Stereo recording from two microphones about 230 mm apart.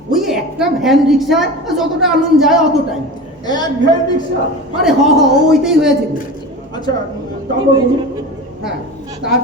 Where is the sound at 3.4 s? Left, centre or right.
Centre.